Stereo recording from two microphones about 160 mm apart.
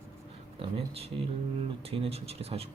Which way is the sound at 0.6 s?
40° right (ahead or behind).